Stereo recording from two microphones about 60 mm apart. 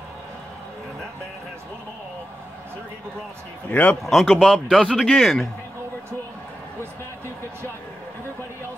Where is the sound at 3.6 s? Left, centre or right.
Left.